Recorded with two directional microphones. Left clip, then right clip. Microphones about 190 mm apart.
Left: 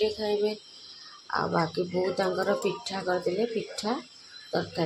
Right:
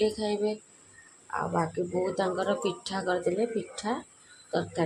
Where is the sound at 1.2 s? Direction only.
10° left (ahead or behind).